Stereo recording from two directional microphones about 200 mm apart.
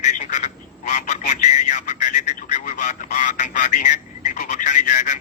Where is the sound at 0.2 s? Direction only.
35° left (ahead or behind).